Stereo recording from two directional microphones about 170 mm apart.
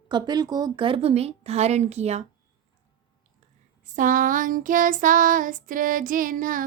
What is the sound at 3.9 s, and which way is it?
A woman's voice, 50° right (ahead or behind).